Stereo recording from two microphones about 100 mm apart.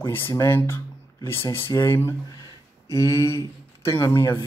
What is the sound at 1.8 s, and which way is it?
Speech, 25° left (ahead or behind).